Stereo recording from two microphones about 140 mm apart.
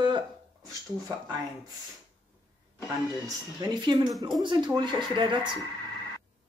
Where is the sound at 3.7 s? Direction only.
30° right (ahead or behind).